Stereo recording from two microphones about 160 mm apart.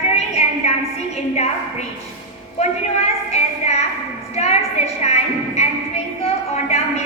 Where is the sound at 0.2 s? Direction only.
40° left (ahead or behind).